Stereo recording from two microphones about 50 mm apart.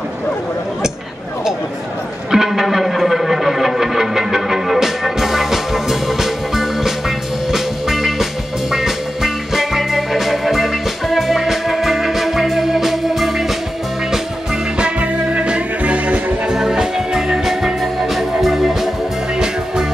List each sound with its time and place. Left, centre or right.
2.3 s music: centre
14.8 s music: right
16.4 s music: centre